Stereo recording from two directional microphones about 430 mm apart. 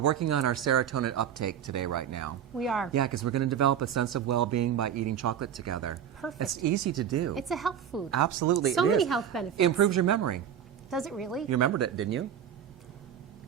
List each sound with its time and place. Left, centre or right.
0.0 s speech: right
2.6 s a woman's voice: centre
2.9 s speech: right
7.3 s a woman's voice: centre
8.1 s speech: right
8.7 s a woman's voice: centre
9.6 s speech: right
10.8 s a woman's voice: centre
11.4 s speech: right